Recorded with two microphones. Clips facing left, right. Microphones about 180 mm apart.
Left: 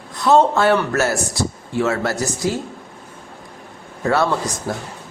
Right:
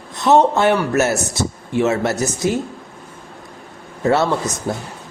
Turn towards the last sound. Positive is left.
turn(degrees=-25)  # may be behind; listen again after turning